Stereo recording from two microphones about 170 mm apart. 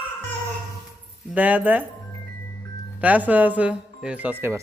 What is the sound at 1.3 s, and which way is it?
Speech, 10° right (ahead or behind).